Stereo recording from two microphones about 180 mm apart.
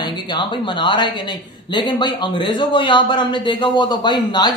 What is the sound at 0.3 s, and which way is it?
A man's voice, 25° left (ahead or behind).